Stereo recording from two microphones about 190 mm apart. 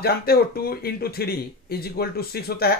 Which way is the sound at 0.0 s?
55° left (ahead or behind).